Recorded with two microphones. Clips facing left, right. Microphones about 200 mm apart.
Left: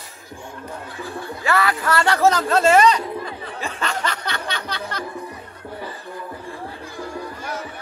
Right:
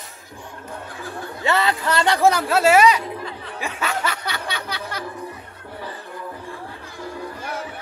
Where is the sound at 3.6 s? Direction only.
5° right (ahead or behind).